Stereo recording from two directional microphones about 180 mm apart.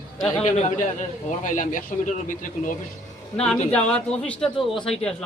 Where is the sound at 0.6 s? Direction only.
45° left (ahead or behind).